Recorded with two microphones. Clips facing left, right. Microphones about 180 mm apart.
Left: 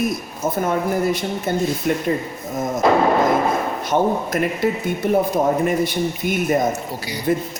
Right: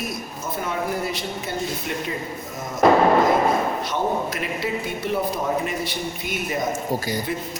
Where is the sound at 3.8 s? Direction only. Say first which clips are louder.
Left 5 dB; 50° left (ahead or behind).